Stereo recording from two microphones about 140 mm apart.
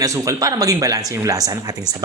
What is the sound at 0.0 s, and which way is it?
A man's voice, 25° right (ahead or behind).